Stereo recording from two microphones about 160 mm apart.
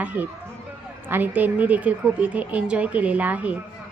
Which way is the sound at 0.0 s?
10° right (ahead or behind).